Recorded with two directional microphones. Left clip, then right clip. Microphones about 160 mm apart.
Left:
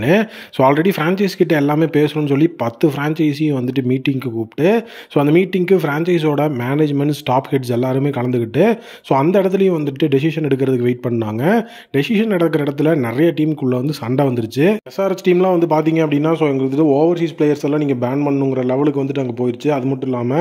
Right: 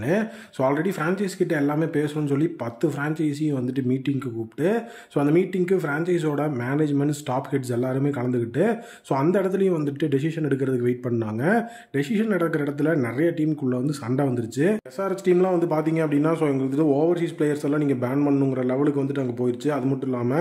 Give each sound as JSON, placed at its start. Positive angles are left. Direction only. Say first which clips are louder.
{"t": 0.0, "sound": "speech", "louder": "left 9 dB", "side_deg": 45}
{"t": 18.1, "sound": "a man's voice", "louder": "left 5 dB", "side_deg": 20}
{"t": 18.5, "sound": "a man's voice", "louder": "left 6 dB", "side_deg": 30}